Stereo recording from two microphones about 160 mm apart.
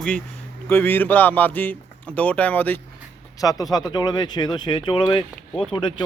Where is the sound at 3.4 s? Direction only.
25° left (ahead or behind).